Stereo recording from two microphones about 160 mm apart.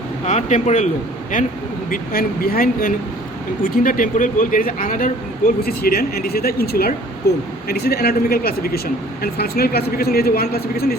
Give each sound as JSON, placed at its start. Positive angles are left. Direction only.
{"t": 0.3, "sound": "speech", "side_deg": 45}